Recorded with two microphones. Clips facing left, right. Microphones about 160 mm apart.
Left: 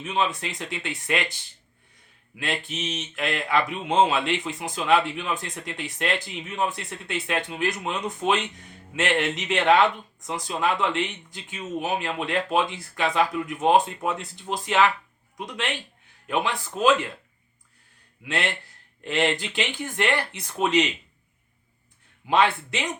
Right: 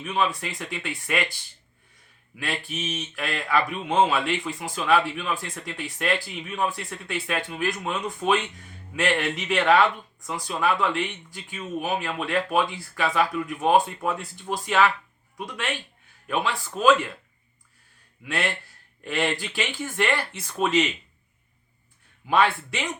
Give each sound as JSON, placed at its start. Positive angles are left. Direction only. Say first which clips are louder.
{"t": 0.0, "sound": "speech", "louder": "even", "side_deg": 20}
{"t": 2.4, "sound": "speech", "louder": "left 1 dB", "side_deg": 20}
{"t": 18.3, "sound": "speech", "louder": "even", "side_deg": 20}
{"t": 22.3, "sound": "speech", "louder": "even", "side_deg": 20}